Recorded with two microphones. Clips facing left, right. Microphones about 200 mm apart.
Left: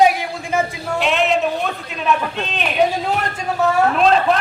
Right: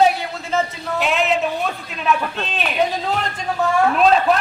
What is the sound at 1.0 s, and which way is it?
A man's voice, centre (ahead or behind).